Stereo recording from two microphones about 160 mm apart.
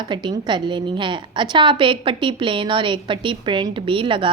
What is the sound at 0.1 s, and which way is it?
A woman's voice, 30° right (ahead or behind).